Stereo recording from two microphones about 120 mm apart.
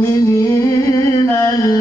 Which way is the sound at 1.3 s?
25° left (ahead or behind).